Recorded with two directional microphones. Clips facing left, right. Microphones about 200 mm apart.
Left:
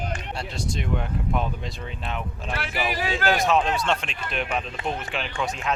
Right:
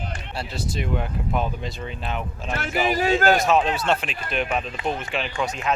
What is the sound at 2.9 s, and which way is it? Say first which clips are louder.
Speech: right 6 dB; 45° right (ahead or behind).